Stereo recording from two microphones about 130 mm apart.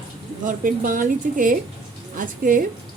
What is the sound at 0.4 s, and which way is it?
Speech, 90° right.